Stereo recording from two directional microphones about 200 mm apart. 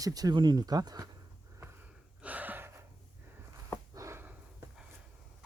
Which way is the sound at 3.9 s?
15° right (ahead or behind).